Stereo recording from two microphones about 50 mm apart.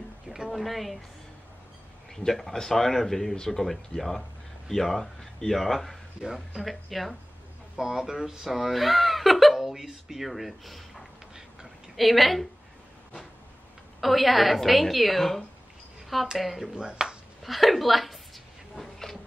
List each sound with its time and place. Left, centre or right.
0.5 s a woman's voice: centre
2.1 s a woman's voice: centre
7.7 s a woman's voice: centre
14.0 s a woman's voice: centre
16.7 s speech: centre
17.4 s a sound: centre